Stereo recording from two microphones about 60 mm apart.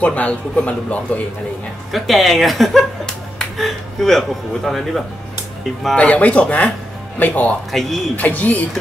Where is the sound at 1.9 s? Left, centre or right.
Centre.